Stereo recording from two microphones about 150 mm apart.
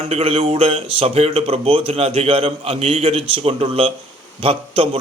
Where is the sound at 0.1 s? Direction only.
40° right (ahead or behind).